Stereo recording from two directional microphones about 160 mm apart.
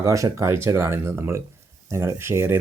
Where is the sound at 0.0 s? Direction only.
20° right (ahead or behind).